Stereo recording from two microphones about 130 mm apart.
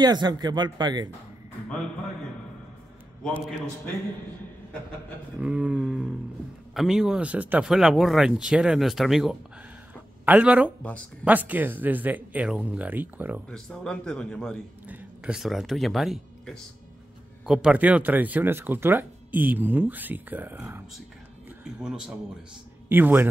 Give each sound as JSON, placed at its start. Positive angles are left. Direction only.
{"t": 0.0, "sound": "speech", "side_deg": -35}
{"t": 5.4, "sound": "speech", "side_deg": -10}
{"t": 13.5, "sound": "speech", "side_deg": 5}
{"t": 14.9, "sound": "speech", "side_deg": -5}